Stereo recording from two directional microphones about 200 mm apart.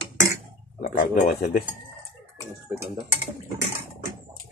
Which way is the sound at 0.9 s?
45° left (ahead or behind).